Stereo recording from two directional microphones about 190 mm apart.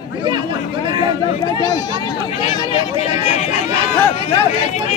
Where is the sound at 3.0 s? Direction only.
35° left (ahead or behind).